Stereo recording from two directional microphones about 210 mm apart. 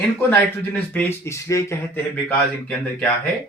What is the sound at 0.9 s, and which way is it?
Speech, 10° left (ahead or behind).